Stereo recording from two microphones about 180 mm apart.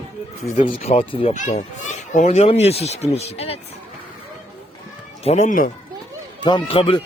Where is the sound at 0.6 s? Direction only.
35° left (ahead or behind).